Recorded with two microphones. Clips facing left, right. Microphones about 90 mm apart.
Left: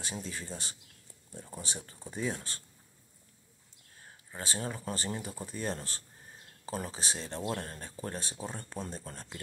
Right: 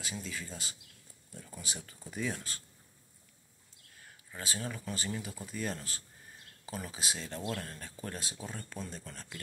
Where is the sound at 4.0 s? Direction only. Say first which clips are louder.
Left 2 dB; 30° left (ahead or behind).